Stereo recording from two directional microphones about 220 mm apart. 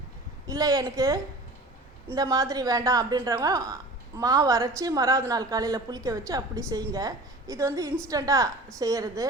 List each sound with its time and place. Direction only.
0.4 s a woman's voice: 15° right (ahead or behind)